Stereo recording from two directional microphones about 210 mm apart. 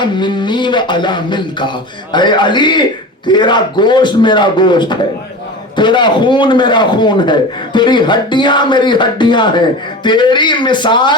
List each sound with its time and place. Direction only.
0.0 s a man's voice: 20° left (ahead or behind)